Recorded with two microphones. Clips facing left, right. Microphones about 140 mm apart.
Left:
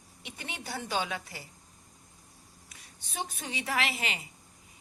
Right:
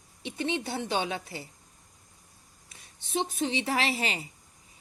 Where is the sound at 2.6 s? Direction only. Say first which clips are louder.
Right 2 dB; 25° right (ahead or behind).